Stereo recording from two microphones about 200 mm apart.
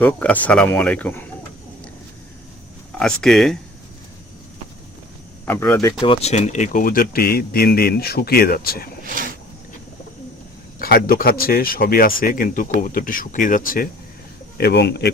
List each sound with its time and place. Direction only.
0.0 s speech: 5° left (ahead or behind)
3.0 s speech: 5° left (ahead or behind)
5.5 s speech: 10° left (ahead or behind)
6.0 s speech: 30° left (ahead or behind); by 8.9 s 50° left (ahead or behind)
10.8 s speech: 50° left (ahead or behind)
14.6 s speech: 55° left (ahead or behind)